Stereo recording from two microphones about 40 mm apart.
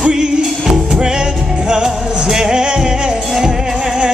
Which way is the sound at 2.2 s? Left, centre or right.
Centre.